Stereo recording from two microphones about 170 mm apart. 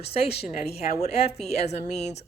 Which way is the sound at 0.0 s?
35° left (ahead or behind).